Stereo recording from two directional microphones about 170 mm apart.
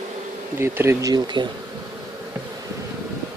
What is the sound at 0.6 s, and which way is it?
Speech, 15° right (ahead or behind).